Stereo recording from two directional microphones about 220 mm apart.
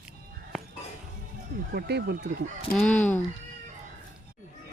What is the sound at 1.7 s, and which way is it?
Speech, 50° right (ahead or behind).